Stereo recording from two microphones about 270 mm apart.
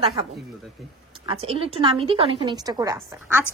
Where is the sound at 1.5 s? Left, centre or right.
Right.